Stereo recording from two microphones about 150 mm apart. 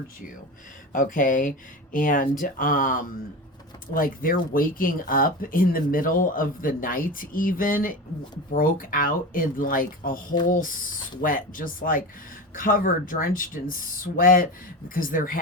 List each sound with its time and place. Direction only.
0.9 s speech: 65° left (ahead or behind)